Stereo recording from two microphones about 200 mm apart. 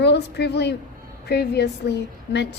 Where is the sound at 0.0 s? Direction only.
55° left (ahead or behind).